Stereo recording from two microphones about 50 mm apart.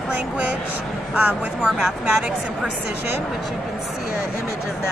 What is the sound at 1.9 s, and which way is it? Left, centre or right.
Speech, centre.